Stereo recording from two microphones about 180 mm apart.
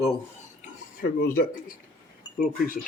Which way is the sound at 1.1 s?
55° left (ahead or behind).